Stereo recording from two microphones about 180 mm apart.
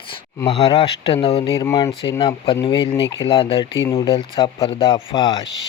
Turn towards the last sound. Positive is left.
turn(degrees=25)  # may be behind; listen again after turning